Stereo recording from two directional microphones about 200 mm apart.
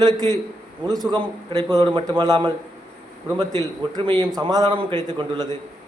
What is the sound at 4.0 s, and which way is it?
A man's voice, 25° right (ahead or behind).